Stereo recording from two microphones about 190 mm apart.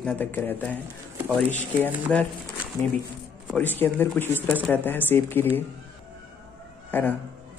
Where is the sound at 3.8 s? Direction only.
10° left (ahead or behind).